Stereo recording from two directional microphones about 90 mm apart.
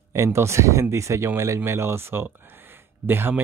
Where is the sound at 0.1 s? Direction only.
30° right (ahead or behind).